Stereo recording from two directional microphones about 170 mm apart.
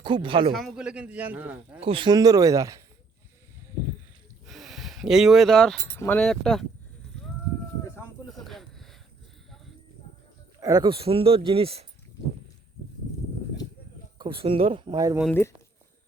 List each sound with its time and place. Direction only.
0.0 s speech: 30° right (ahead or behind)
0.5 s a man's voice: centre (ahead or behind)
1.8 s speech: 30° right (ahead or behind)
4.4 s a sound: centre (ahead or behind)
6.0 s speech: 10° left (ahead or behind)
8.3 s a sound: centre (ahead or behind)
10.6 s speech: 20° right (ahead or behind)
14.2 s speech: 30° right (ahead or behind)
15.3 s speech: 15° left (ahead or behind)